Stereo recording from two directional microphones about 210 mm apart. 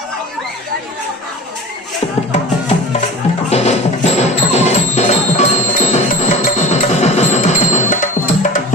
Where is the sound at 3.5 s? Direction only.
30° left (ahead or behind).